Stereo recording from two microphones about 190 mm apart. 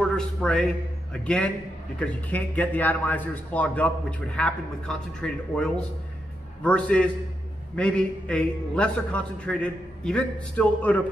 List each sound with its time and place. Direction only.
0.0 s a man's voice: 5° left (ahead or behind)